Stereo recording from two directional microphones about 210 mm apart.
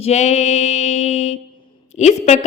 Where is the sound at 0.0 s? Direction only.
30° left (ahead or behind).